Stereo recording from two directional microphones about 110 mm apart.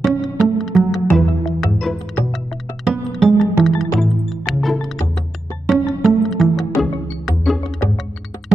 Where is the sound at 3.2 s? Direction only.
Centre (ahead or behind).